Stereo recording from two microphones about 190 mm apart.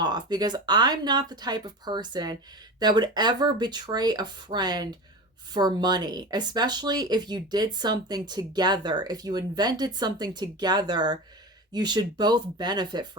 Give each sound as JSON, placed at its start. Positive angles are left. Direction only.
{"t": 0.0, "sound": "speech", "side_deg": -20}